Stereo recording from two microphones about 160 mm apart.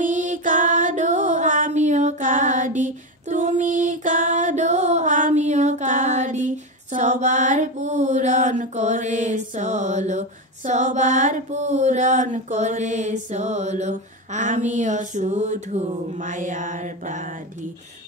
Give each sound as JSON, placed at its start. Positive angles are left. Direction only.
{"t": 0.0, "sound": "music", "side_deg": -50}